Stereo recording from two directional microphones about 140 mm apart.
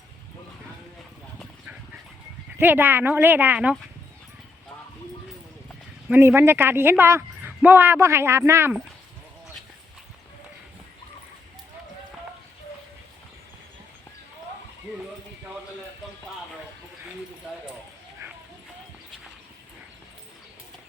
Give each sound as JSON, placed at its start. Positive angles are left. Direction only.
{"t": 2.6, "sound": "a woman's voice", "side_deg": -15}
{"t": 6.1, "sound": "a woman's voice", "side_deg": -15}